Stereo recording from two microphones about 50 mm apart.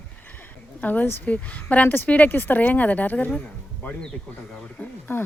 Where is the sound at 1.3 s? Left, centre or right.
Left.